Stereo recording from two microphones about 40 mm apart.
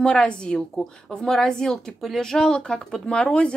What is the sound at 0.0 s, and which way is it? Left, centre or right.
Speech, left.